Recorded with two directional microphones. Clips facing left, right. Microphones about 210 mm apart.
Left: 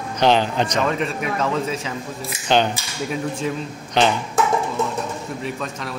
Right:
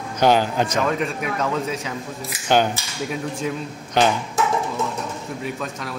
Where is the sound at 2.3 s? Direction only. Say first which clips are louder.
Even; 10° right (ahead or behind).